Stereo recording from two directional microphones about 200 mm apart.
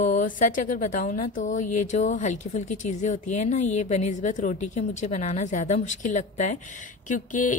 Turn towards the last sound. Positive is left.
turn(degrees=40)  # may be behind; listen again after turning